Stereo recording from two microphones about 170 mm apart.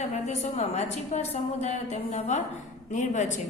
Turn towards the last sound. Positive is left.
turn(degrees=45)  # may be behind; listen again after turning